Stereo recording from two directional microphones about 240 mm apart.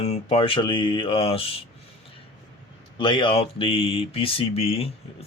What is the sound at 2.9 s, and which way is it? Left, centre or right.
Speech, centre.